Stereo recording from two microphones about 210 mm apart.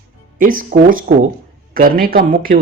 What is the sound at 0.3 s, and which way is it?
A man's voice, 40° right (ahead or behind).